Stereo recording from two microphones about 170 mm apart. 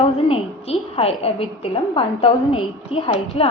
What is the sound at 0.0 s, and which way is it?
A woman's voice, 35° left (ahead or behind).